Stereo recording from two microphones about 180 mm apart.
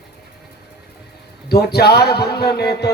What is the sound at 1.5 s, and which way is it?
A man's voice, 60° left (ahead or behind).